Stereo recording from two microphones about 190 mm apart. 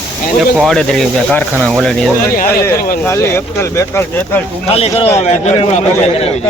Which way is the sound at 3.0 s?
15° left (ahead or behind).